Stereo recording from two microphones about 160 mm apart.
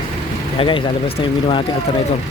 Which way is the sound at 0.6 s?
35° left (ahead or behind).